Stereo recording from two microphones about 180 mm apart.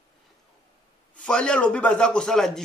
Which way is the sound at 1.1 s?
5° left (ahead or behind).